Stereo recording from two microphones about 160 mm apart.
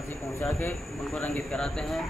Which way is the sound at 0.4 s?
10° left (ahead or behind).